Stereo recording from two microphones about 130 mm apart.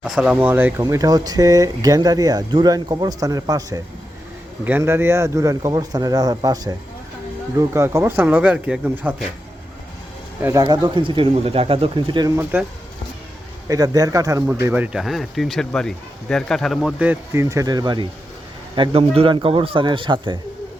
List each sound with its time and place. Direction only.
0.0 s speech: 5° right (ahead or behind); by 3.8 s 30° right (ahead or behind)
4.8 s speech: 20° right (ahead or behind)
10.4 s speech: 25° right (ahead or behind)
12.4 s speech: 15° right (ahead or behind)
13.7 s speech: 30° right (ahead or behind)
14.6 s speech: 15° right (ahead or behind)
14.9 s a man's voice: centre (ahead or behind)
17.0 s speech: 15° right (ahead or behind)
17.4 s speech: 25° right (ahead or behind)
18.8 s speech: 45° right (ahead or behind)